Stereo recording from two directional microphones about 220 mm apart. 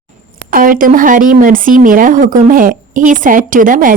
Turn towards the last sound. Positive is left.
turn(degrees=-35)  # may be behind; listen again after turning